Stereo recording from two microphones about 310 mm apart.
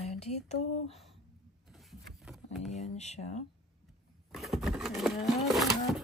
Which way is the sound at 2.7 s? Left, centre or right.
Left.